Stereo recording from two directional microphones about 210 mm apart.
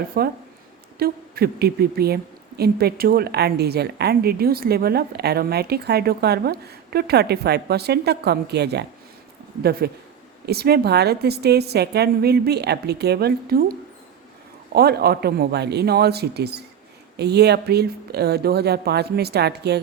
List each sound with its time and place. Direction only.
0.1 s a woman's voice: 45° right (ahead or behind)